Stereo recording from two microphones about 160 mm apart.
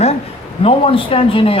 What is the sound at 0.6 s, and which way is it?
Speech, 35° left (ahead or behind).